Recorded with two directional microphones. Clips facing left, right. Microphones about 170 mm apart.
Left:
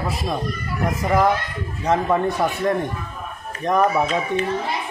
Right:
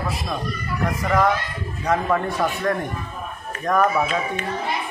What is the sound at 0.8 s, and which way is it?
A man's voice, 15° left (ahead or behind).